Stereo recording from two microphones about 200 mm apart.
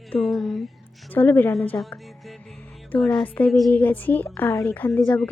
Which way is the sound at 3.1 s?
10° left (ahead or behind).